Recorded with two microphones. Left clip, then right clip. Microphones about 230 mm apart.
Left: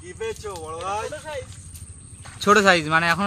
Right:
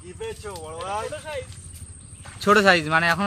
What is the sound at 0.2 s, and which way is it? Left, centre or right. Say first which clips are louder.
Speech: left 3 dB; left.